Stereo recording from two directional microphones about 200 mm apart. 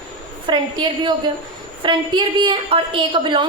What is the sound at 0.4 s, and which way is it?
A woman's voice, 20° right (ahead or behind).